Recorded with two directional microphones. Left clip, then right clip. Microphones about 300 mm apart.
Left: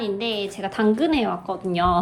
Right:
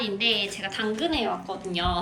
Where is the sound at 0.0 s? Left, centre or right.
Centre.